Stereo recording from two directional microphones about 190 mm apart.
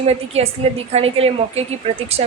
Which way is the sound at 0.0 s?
35° right (ahead or behind).